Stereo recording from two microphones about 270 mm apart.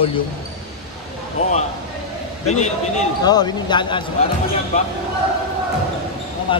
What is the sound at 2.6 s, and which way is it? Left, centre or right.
Speech, left.